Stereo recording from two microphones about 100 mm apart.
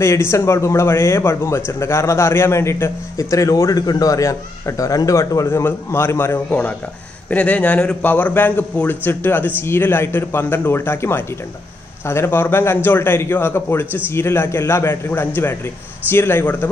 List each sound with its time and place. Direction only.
0.0 s a man's voice: 25° left (ahead or behind)